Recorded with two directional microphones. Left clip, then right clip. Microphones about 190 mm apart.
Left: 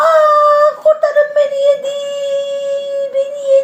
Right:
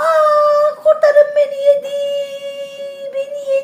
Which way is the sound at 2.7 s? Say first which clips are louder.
Left 9 dB; 25° right (ahead or behind).